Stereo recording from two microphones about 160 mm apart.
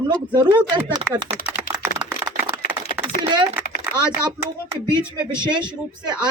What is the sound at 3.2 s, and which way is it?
Typing, 30° right (ahead or behind).